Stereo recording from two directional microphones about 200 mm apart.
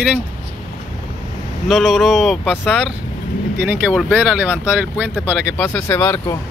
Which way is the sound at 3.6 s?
5° right (ahead or behind).